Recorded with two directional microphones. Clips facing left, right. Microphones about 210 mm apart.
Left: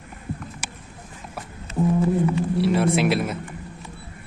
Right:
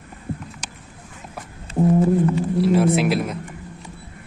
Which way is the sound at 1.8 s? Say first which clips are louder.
Right 3 dB; 45° right (ahead or behind).